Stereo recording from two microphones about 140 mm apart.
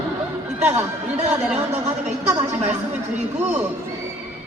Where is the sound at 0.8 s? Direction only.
55° right (ahead or behind).